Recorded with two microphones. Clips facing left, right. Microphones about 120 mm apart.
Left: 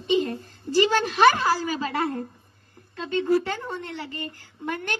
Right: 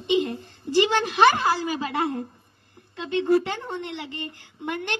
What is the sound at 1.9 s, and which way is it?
A woman's voice, 20° right (ahead or behind).